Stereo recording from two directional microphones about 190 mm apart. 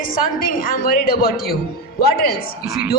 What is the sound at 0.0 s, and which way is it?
A woman's voice, 50° left (ahead or behind).